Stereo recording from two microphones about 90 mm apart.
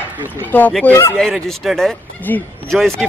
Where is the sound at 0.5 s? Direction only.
20° left (ahead or behind).